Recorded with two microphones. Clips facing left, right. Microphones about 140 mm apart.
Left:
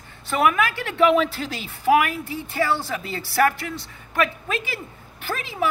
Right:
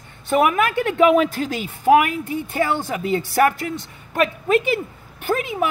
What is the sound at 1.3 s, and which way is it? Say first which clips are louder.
Speech: right 6 dB; 45° right (ahead or behind).